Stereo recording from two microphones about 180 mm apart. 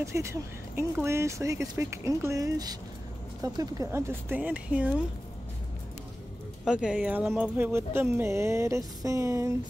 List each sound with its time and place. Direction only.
0.0 s speech: 15° right (ahead or behind)
6.6 s speech: 5° right (ahead or behind)